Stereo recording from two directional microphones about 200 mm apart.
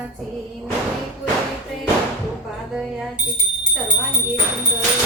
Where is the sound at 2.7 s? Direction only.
Centre (ahead or behind).